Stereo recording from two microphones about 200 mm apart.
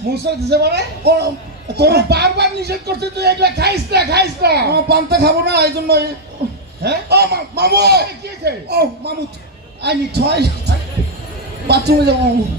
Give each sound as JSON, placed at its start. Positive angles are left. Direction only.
{"t": 0.0, "sound": "a man's voice", "side_deg": -55}